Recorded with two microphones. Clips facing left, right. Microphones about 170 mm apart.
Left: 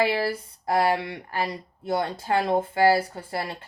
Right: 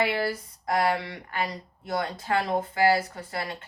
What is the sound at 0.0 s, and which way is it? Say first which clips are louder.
Speech: left 2 dB; 30° left (ahead or behind).